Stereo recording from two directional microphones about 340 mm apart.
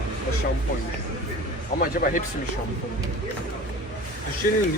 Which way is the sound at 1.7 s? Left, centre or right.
Left.